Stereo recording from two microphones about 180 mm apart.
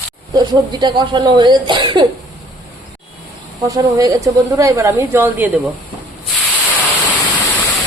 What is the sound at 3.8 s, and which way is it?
A woman's voice, 20° right (ahead or behind).